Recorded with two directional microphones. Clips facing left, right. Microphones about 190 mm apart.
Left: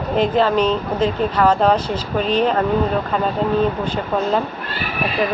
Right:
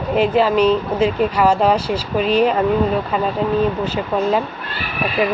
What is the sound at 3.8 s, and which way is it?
Speech, 5° right (ahead or behind).